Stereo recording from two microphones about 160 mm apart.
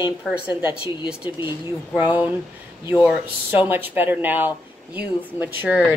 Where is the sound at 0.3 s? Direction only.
10° right (ahead or behind).